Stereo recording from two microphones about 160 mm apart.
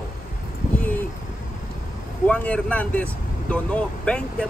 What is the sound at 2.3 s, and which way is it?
Speech, 10° left (ahead or behind).